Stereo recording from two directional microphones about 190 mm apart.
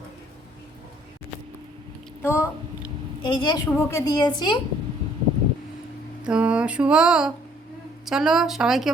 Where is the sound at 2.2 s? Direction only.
15° left (ahead or behind).